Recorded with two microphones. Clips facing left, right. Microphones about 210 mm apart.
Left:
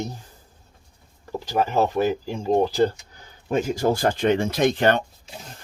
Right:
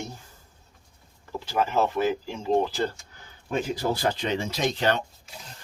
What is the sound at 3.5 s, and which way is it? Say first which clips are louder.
Speech: left 5 dB; 45° left (ahead or behind).